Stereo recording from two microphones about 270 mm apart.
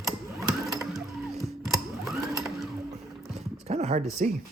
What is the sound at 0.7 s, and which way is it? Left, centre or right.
Mechanisms, centre.